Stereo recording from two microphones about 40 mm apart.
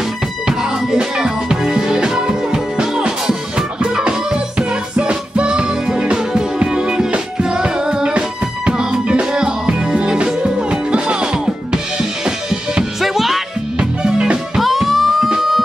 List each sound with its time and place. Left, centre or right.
0.5 s music: centre
11.7 s drum kit: centre
13.0 s music: centre
13.7 s music: right
14.6 s music: centre